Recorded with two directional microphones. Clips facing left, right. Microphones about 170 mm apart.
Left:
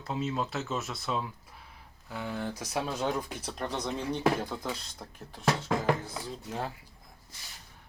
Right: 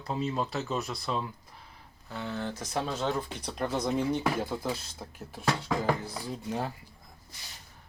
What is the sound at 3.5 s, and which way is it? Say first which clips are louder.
Speech: right 5 dB; 5° right (ahead or behind).